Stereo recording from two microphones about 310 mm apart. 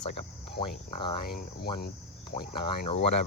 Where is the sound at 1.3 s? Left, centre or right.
Left.